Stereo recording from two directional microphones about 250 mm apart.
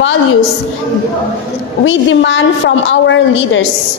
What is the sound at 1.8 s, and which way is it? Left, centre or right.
A woman's voice, left.